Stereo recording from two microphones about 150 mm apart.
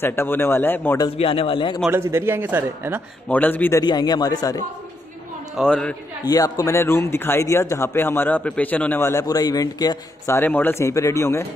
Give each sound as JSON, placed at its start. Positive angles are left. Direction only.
{"t": 0.0, "sound": "speech", "side_deg": 15}
{"t": 1.1, "sound": "a man's voice", "side_deg": 40}
{"t": 1.9, "sound": "a man's voice", "side_deg": -15}
{"t": 3.3, "sound": "speech", "side_deg": 10}
{"t": 3.8, "sound": "a man's voice", "side_deg": 30}
{"t": 5.6, "sound": "a man's voice", "side_deg": 5}
{"t": 6.2, "sound": "speech", "side_deg": 25}